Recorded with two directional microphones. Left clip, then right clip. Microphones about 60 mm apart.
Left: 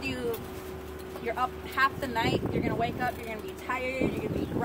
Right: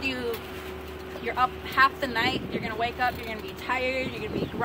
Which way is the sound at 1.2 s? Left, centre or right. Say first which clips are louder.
Right 5 dB; left.